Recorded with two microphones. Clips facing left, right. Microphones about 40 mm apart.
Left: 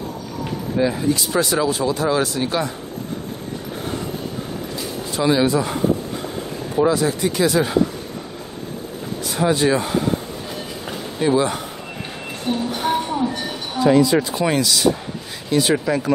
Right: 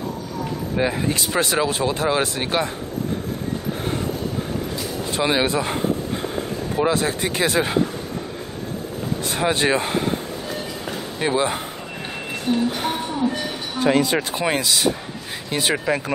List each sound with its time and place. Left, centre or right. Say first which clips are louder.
0.7 s speech: left 3 dB; right
5.1 s speech: left 3 dB; right
6.8 s speech: left 3 dB; right
9.2 s speech: left 3 dB; right
9.8 s speech: left 1 dB; right
11.1 s speech: left 3 dB; right
13.7 s speech: left 4 dB; right
14.4 s speech: left 2 dB; right